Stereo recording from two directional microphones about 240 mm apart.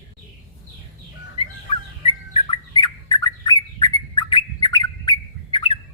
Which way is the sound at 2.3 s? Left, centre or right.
Centre.